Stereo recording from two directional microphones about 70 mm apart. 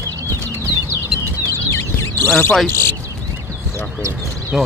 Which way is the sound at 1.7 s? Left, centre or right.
Left.